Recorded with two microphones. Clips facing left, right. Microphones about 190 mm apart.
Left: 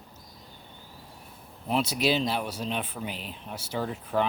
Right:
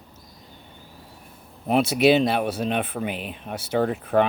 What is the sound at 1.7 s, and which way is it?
Speech, 60° right (ahead or behind).